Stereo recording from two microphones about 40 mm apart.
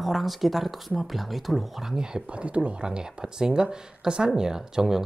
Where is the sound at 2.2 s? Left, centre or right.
Right; by 5.0 s centre.